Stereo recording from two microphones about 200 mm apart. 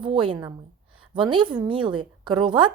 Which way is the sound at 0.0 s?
25° right (ahead or behind).